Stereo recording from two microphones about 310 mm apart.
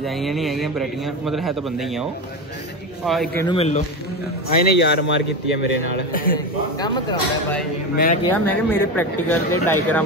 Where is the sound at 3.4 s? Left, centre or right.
Centre.